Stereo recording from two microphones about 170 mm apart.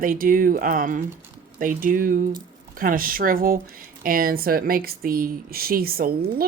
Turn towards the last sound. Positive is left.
turn(degrees=-60)  # may be behind; listen again after turning